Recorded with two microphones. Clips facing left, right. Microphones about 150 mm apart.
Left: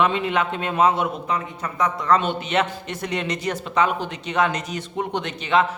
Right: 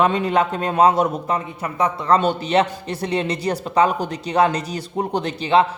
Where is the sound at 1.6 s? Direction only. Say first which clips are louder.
Right 2 dB; 30° right (ahead or behind).